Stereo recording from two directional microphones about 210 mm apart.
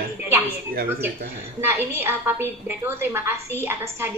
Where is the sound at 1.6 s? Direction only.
10° right (ahead or behind).